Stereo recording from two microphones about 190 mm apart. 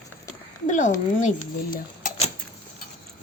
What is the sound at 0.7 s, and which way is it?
Speech, 40° left (ahead or behind).